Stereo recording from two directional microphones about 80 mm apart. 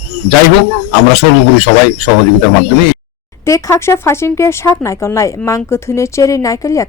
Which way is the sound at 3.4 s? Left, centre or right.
Left.